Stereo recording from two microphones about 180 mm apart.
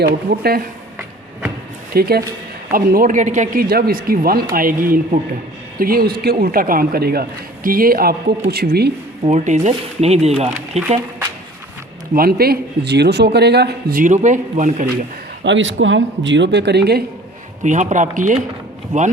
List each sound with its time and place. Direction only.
0.0 s a man's voice: 60° right (ahead or behind)
1.9 s a man's voice: 60° right (ahead or behind)
9.2 s speech: 40° right (ahead or behind)
12.1 s a man's voice: 55° right (ahead or behind)
15.4 s speech: 90° right; by 17.0 s 65° right (ahead or behind)
17.6 s speech: 40° right (ahead or behind)